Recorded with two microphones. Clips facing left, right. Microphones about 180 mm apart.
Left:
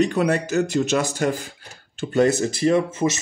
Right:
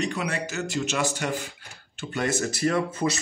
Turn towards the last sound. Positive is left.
turn(degrees=25)  # may be behind; listen again after turning